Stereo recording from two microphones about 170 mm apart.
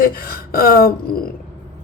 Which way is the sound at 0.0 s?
60° left (ahead or behind).